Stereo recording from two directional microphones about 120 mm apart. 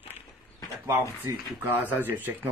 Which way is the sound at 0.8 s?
25° right (ahead or behind).